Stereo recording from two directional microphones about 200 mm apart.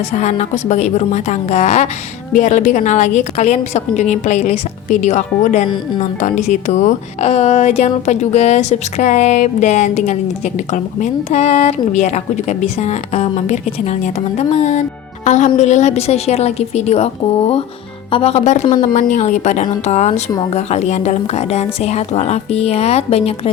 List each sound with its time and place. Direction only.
0.2 s a woman's voice: 35° left (ahead or behind)
18.6 s speech: 25° left (ahead or behind)
18.9 s a woman's voice: 40° left (ahead or behind)